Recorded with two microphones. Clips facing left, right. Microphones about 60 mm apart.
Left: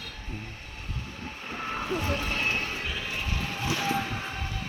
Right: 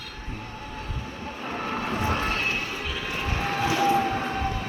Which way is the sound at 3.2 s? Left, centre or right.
Right.